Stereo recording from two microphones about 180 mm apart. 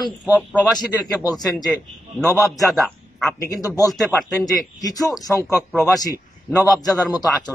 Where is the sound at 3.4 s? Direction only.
20° left (ahead or behind).